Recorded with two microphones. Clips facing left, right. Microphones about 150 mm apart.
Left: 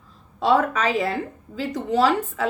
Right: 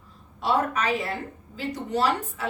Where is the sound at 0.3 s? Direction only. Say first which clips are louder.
Left 5 dB; 90° left.